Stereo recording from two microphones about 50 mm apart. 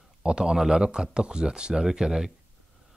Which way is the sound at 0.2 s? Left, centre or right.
Centre.